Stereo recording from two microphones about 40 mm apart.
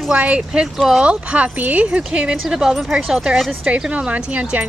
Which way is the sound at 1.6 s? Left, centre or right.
Right.